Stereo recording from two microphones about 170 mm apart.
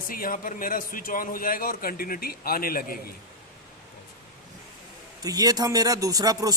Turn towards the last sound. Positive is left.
turn(degrees=-20)  # may be behind; listen again after turning